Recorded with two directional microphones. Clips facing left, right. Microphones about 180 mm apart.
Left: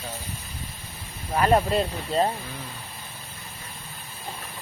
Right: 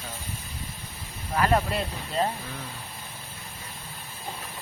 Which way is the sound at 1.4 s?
25° left (ahead or behind).